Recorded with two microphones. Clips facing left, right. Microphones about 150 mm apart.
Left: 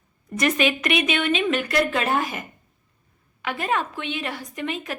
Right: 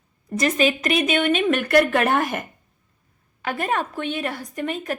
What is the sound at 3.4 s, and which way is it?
A woman's voice, 45° right (ahead or behind).